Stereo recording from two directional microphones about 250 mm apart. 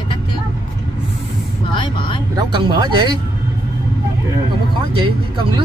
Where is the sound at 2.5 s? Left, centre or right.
Centre.